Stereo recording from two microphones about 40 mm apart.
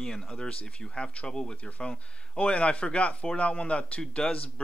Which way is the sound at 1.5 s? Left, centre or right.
Left.